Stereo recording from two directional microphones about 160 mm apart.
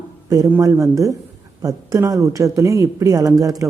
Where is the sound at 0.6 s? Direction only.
20° right (ahead or behind).